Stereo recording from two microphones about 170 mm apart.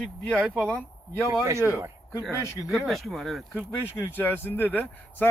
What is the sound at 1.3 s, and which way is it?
Speech, 15° right (ahead or behind).